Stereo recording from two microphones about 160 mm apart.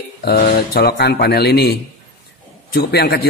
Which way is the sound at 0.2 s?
70° left (ahead or behind).